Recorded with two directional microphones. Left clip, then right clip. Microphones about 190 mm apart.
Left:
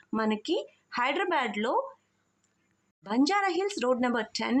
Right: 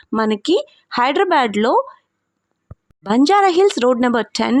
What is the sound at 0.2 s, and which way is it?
Speech, 55° right (ahead or behind).